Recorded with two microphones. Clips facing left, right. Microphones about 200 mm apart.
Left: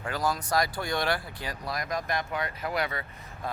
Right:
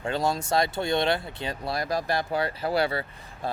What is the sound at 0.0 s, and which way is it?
Speech, 25° right (ahead or behind).